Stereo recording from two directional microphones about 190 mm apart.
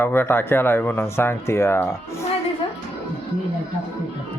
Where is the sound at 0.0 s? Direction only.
10° left (ahead or behind).